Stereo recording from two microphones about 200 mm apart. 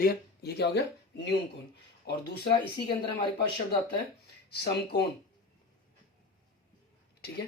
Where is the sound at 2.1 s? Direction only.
55° left (ahead or behind).